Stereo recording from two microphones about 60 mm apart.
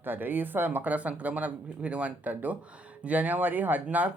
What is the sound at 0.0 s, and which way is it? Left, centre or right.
Speech, right.